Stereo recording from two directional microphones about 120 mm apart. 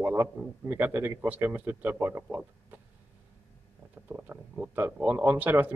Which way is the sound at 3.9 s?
15° right (ahead or behind).